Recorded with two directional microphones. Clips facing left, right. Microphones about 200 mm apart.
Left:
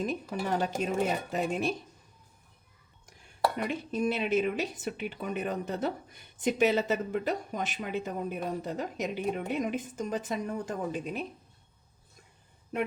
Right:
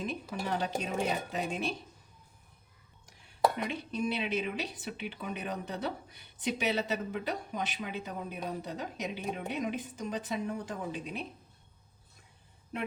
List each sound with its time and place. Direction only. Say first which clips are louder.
0.0 s speech: left 4 dB; 45° left (ahead or behind)
3.6 s speech: left 3 dB; 45° left (ahead or behind)